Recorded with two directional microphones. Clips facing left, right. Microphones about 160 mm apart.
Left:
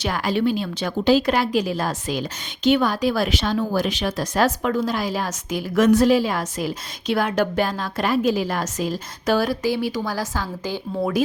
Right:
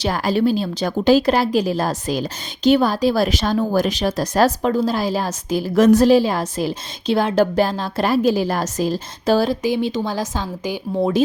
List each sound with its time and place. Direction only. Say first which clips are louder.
0.0 s a woman's voice: right 3 dB; 35° right (ahead or behind); by 11.1 s 20° right (ahead or behind)